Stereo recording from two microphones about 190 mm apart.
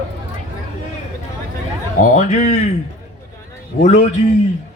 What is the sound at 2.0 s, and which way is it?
Speech, 40° left (ahead or behind).